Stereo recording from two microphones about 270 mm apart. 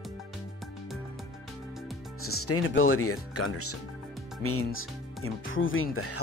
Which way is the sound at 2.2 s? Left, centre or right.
Left.